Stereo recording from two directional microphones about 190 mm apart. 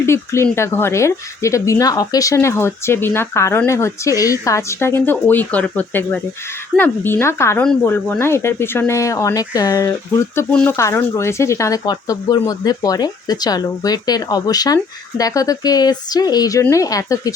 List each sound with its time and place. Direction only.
0.0 s speech: 15° left (ahead or behind)